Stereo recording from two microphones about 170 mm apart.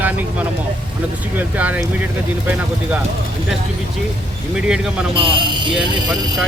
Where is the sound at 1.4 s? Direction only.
10° right (ahead or behind).